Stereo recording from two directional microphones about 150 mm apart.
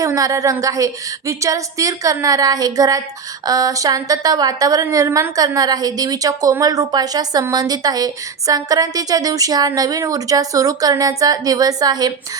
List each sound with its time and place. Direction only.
0.0 s a woman's voice: 20° right (ahead or behind)